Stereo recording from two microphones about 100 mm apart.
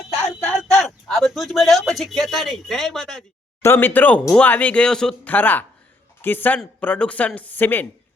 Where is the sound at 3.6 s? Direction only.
25° left (ahead or behind); by 5.1 s 5° left (ahead or behind).